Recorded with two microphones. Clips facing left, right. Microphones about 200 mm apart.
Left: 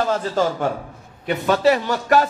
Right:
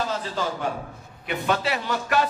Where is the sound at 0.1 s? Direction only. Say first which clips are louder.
Left 7 dB; 50° left (ahead or behind).